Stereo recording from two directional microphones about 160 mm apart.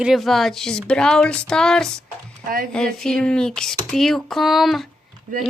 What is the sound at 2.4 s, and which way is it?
Speech, 65° right (ahead or behind).